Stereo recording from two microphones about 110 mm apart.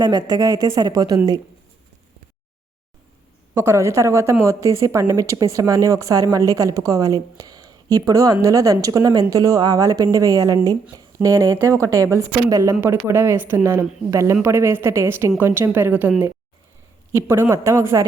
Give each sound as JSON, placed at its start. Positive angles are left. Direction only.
{"t": 0.0, "sound": "a woman's voice", "side_deg": -40}
{"t": 3.5, "sound": "a woman's voice", "side_deg": -20}